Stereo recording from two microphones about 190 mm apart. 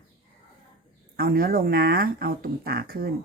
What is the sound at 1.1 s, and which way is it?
Speech, 50° right (ahead or behind).